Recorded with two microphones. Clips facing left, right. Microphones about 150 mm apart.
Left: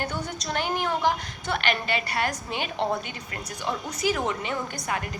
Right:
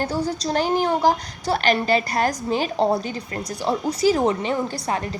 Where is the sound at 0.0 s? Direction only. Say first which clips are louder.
Right 8 dB; 35° right (ahead or behind).